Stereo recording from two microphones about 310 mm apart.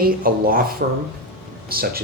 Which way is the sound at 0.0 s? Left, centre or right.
Right.